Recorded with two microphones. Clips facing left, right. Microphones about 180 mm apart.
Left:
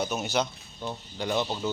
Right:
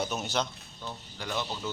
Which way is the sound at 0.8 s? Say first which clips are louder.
Left 7 dB; 25° left (ahead or behind).